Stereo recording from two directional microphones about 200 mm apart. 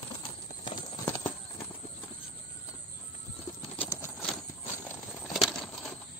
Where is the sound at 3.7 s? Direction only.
10° left (ahead or behind).